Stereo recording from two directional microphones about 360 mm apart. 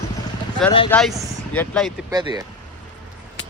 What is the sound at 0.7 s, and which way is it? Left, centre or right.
Speech, centre.